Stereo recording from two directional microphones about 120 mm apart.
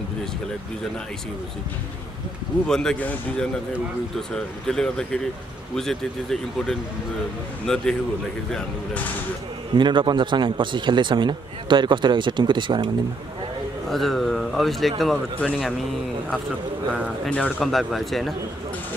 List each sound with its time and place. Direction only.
2.7 s a man's voice: 5° left (ahead or behind)
4.6 s a man's voice: 5° left (ahead or behind)
9.8 s a man's voice: 40° right (ahead or behind)
13.8 s a man's voice: centre (ahead or behind)
17.3 s a man's voice: 5° left (ahead or behind)